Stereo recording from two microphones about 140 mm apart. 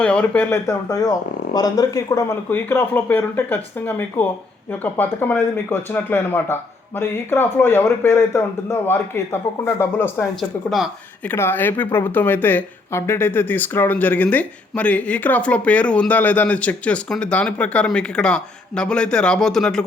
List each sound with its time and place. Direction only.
0.0 s speech: 10° left (ahead or behind)